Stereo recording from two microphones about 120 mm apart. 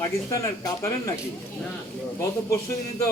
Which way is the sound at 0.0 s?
30° left (ahead or behind).